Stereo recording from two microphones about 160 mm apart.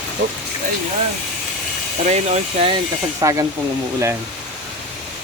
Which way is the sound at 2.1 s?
45° right (ahead or behind).